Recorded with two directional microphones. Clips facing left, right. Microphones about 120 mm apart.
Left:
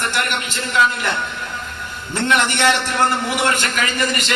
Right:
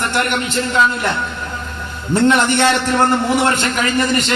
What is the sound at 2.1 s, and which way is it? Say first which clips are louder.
A man's voice: right 6 dB; 30° right (ahead or behind).